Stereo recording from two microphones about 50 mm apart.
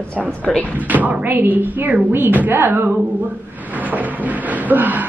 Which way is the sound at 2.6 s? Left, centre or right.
Right.